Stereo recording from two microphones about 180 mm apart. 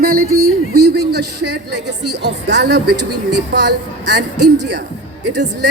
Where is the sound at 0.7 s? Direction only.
65° right (ahead or behind).